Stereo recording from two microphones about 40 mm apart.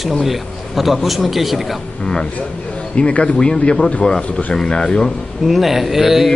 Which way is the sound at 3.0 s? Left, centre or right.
Left.